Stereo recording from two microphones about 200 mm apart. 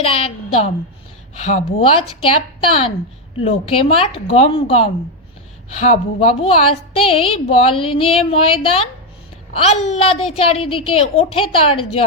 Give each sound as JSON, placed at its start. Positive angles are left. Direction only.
{"t": 0.0, "sound": "a woman's voice", "side_deg": 30}
{"t": 9.6, "sound": "a woman's voice", "side_deg": 30}